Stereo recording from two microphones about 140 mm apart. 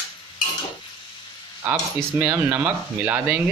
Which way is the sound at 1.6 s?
15° right (ahead or behind).